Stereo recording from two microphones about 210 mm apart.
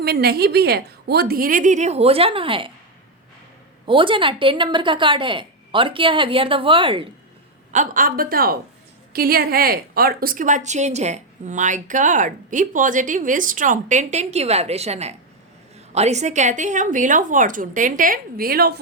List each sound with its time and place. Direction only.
0.0 s a woman's voice: 50° right (ahead or behind); by 2.7 s 25° right (ahead or behind)
3.8 s speech: 25° right (ahead or behind)
7.7 s a woman's voice: 40° right (ahead or behind)